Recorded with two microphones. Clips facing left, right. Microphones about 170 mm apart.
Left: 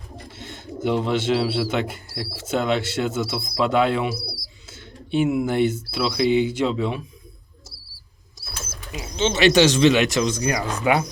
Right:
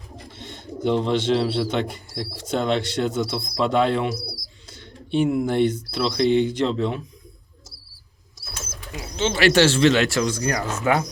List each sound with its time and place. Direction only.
0.3 s speech: 5° left (ahead or behind)
9.1 s speech: 20° left (ahead or behind)